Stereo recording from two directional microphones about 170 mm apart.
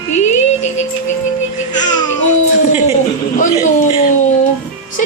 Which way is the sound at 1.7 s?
25° left (ahead or behind).